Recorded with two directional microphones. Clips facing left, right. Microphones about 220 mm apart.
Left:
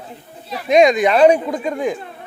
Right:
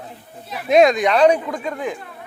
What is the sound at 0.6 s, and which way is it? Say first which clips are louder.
Speech: left 1 dB; centre (ahead or behind).